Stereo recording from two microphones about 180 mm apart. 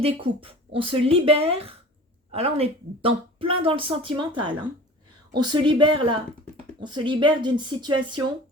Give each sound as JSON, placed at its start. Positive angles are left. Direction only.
{"t": 0.0, "sound": "speech", "side_deg": -30}